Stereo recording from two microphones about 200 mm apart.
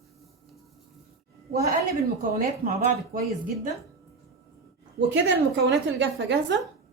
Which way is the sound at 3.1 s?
50° right (ahead or behind).